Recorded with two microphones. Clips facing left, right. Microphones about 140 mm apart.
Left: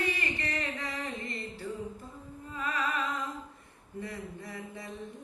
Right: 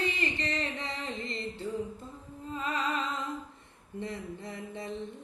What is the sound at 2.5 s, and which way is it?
Music, 25° right (ahead or behind).